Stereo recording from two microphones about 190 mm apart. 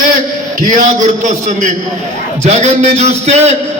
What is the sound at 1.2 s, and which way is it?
A man's voice, 40° right (ahead or behind).